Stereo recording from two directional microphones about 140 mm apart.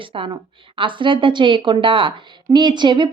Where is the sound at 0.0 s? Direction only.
40° right (ahead or behind).